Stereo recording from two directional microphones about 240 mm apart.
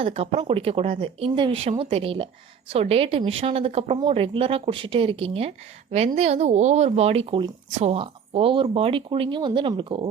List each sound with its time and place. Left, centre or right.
0.0 s a woman's voice: right